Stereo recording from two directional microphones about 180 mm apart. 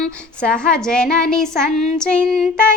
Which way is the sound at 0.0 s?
5° left (ahead or behind).